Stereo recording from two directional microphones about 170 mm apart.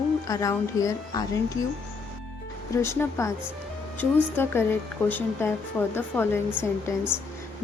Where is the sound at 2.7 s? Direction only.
15° left (ahead or behind).